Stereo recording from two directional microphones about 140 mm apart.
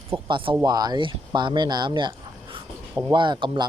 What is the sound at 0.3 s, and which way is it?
Speech, 35° right (ahead or behind).